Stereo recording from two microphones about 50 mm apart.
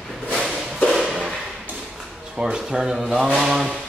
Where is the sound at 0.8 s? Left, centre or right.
Centre.